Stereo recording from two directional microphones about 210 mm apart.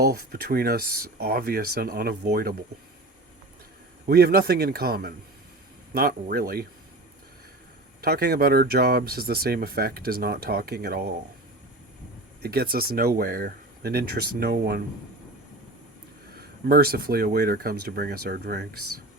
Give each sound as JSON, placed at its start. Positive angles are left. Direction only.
{"t": 0.0, "sound": "speech", "side_deg": -45}
{"t": 4.0, "sound": "speech", "side_deg": -50}
{"t": 8.0, "sound": "speech", "side_deg": -50}
{"t": 12.4, "sound": "speech", "side_deg": -45}
{"t": 16.3, "sound": "speech", "side_deg": -45}